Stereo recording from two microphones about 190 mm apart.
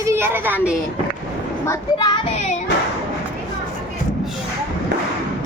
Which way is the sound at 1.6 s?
20° left (ahead or behind).